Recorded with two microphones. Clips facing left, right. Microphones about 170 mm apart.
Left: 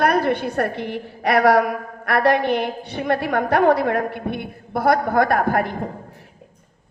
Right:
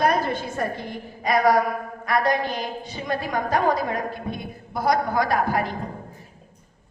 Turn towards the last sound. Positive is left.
turn(degrees=55)  # may be behind; listen again after turning